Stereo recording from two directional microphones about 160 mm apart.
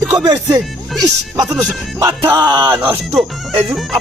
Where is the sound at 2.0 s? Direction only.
15° right (ahead or behind).